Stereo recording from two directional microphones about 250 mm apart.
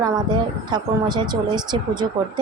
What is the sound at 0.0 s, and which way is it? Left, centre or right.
A woman's voice, centre.